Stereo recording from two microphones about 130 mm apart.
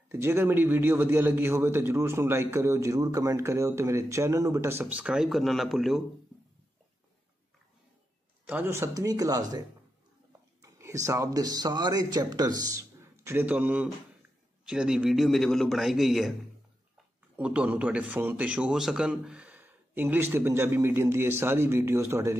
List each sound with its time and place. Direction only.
0.1 s a man's voice: 20° right (ahead or behind); by 6.0 s centre (ahead or behind)
8.5 s a man's voice: 15° right (ahead or behind)
10.6 s a man's voice: 25° right (ahead or behind); by 16.3 s centre (ahead or behind)
17.4 s a man's voice: 10° right (ahead or behind)